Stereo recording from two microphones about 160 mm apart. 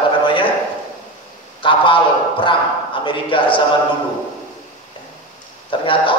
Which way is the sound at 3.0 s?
30° left (ahead or behind).